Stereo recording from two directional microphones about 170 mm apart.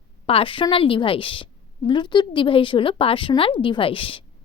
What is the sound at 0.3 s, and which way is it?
A woman's voice, 30° left (ahead or behind).